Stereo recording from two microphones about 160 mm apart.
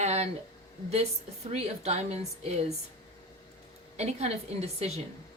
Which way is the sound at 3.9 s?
40° right (ahead or behind).